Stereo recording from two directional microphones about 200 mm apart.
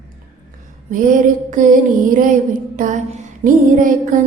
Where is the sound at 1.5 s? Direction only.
40° right (ahead or behind).